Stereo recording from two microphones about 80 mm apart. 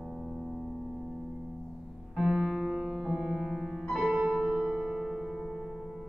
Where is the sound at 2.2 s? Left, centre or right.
Centre.